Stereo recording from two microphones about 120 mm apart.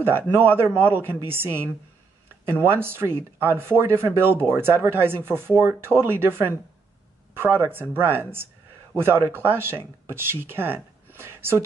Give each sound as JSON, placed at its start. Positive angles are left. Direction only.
{"t": 0.0, "sound": "speech", "side_deg": -15}